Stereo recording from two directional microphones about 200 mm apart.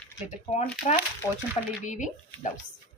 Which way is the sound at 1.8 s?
35° left (ahead or behind).